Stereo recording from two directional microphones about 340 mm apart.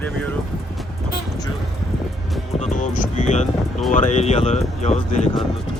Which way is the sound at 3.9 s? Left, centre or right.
Left.